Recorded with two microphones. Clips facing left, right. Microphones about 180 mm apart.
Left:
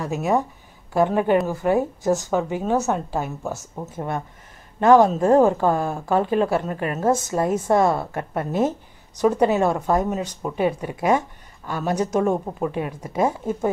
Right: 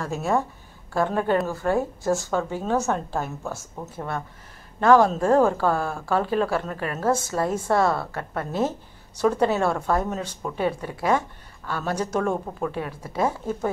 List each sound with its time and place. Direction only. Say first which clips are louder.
0.0 s speech: left 3 dB; 15° left (ahead or behind)